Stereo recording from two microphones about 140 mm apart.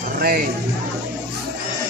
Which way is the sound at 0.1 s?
90° right.